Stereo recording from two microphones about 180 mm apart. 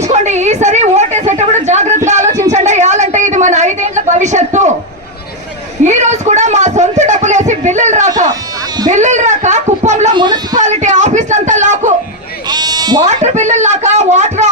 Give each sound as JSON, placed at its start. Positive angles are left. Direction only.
{"t": 0.0, "sound": "a sound", "side_deg": -40}
{"t": 2.0, "sound": "music", "side_deg": -40}
{"t": 2.5, "sound": "a sound", "side_deg": -40}
{"t": 5.8, "sound": "a sound", "side_deg": -40}
{"t": 8.9, "sound": "speech", "side_deg": -40}
{"t": 10.2, "sound": "speech", "side_deg": -25}
{"t": 10.6, "sound": "speech", "side_deg": -40}
{"t": 12.5, "sound": "frog", "side_deg": -20}
{"t": 13.1, "sound": "speech", "side_deg": -40}